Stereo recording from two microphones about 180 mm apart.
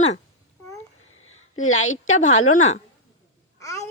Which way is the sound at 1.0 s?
90° left.